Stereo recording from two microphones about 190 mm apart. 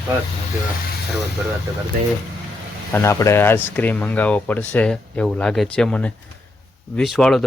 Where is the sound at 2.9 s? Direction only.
15° left (ahead or behind).